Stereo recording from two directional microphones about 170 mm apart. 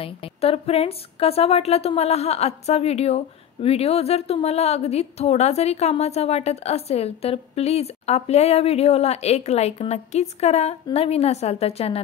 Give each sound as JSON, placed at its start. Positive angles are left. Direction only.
{"t": 0.0, "sound": "a woman's voice", "side_deg": 35}